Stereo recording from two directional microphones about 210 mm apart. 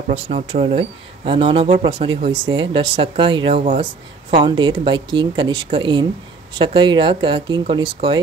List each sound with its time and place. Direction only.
0.1 s speech: 30° right (ahead or behind)